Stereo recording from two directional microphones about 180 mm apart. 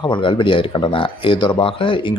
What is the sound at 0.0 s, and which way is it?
Speech, 25° left (ahead or behind).